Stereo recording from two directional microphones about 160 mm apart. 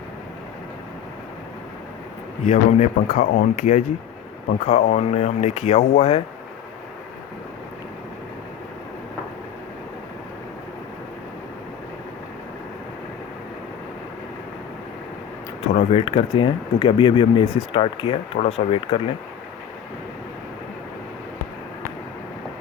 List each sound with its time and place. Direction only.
2.4 s speech: 45° left (ahead or behind)
15.6 s speech: 40° left (ahead or behind)